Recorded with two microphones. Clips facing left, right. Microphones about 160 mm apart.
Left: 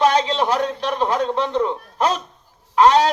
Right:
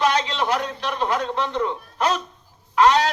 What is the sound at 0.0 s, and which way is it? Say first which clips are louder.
A man's voice: left 4 dB; 30° left (ahead or behind).